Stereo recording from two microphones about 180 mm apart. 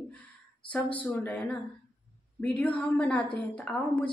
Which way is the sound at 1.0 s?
10° left (ahead or behind).